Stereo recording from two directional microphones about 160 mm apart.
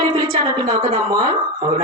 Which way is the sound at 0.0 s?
30° right (ahead or behind).